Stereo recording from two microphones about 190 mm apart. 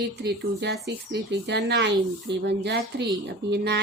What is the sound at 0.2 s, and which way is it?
Speech, 60° right (ahead or behind).